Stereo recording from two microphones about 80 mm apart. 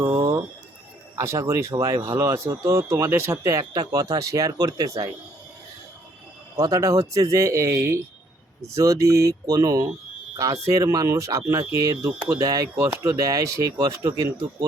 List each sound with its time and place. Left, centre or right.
1.1 s speech: right
3.6 s speech: right
6.6 s speech: right
12.7 s speech: right